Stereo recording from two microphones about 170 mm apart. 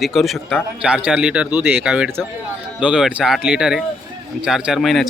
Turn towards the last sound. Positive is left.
turn(degrees=0)  # may be behind; listen again after turning